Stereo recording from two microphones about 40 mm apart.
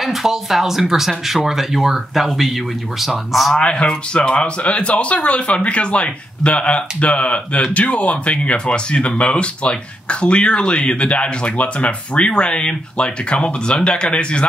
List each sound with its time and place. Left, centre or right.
0.0 s speech: centre
3.5 s speech: left